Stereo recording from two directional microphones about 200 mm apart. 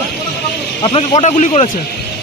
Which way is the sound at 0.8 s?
25° left (ahead or behind).